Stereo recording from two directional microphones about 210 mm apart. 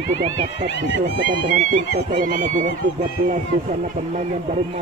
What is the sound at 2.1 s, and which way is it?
A man's voice, 40° right (ahead or behind).